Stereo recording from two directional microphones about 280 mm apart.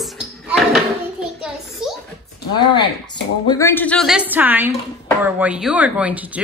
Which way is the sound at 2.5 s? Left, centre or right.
Centre.